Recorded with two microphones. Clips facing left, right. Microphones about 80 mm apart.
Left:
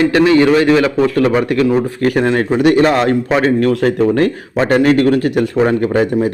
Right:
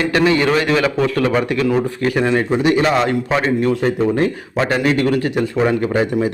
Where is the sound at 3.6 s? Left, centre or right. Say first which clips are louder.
Left 4 dB; left.